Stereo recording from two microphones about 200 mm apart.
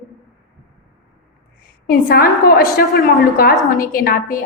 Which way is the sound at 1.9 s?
45° left (ahead or behind).